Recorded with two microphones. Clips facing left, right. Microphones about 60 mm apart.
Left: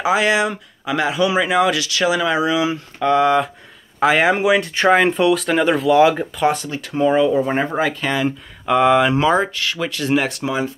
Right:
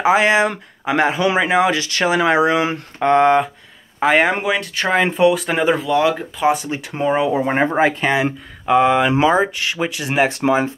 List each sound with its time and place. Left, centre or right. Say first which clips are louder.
0.0 s speech: right 3 dB; right
0.5 s speech: right 2 dB; right
4.0 s speech: left 1 dB; centre
5.9 s speech: left 4 dB; centre
6.3 s speech: right 1 dB; centre
6.6 s speech: left 2 dB; centre
7.5 s speech: right 3 dB; right
8.6 s speech: even; centre; by 10.4 s right
10.4 s speech: right 5 dB; right